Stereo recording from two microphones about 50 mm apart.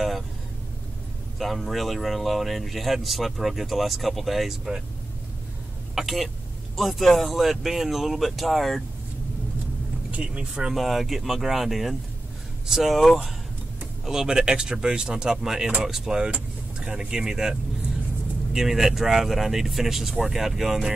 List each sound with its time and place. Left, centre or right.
1.4 s speech: centre
5.9 s speech: centre
10.5 s speech: centre
14.0 s speech: centre